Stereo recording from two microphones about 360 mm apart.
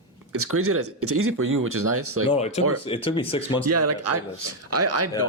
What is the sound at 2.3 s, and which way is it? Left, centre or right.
Speech, centre.